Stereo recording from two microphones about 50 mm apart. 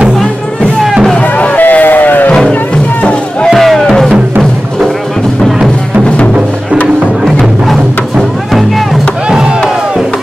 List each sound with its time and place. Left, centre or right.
1.2 s crowd: left
1.6 s a sound: left
3.4 s music: centre